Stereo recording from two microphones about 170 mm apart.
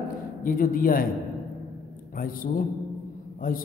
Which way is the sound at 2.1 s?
55° left (ahead or behind).